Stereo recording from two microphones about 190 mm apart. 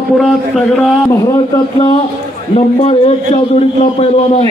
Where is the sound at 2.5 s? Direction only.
35° left (ahead or behind).